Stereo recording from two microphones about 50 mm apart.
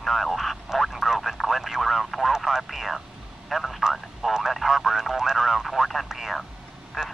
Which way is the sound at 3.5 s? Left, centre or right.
Centre.